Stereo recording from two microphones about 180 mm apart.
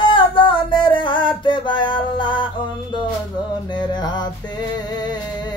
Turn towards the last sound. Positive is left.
turn(degrees=25)  # may be behind; listen again after turning